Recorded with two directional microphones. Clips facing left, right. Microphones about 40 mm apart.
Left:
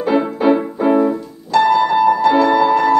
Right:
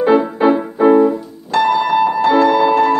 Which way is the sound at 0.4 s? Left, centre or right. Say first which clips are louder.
Left 1 dB; right.